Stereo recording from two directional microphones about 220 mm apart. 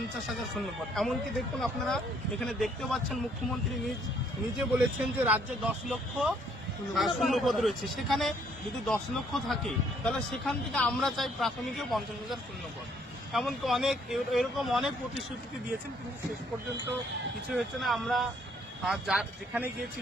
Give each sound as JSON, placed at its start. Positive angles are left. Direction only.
{"t": 0.9, "sound": "a man's voice", "side_deg": 0}
{"t": 4.9, "sound": "a man's voice", "side_deg": -5}
{"t": 17.5, "sound": "a man's voice", "side_deg": 0}